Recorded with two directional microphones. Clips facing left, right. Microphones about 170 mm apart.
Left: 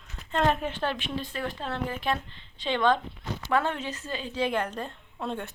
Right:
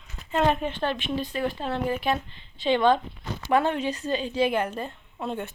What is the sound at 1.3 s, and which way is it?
A woman's voice, 5° right (ahead or behind).